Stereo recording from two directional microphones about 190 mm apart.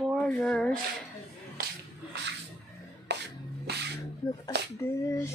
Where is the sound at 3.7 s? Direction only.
55° right (ahead or behind).